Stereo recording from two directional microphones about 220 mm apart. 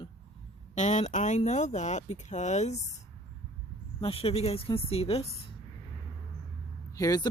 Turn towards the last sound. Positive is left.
turn(degrees=15)  # may be behind; listen again after turning